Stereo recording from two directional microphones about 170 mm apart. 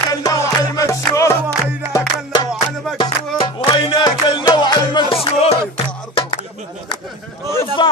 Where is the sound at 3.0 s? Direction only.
30° left (ahead or behind).